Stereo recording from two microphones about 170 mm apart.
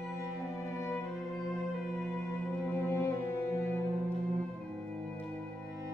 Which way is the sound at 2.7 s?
15° left (ahead or behind).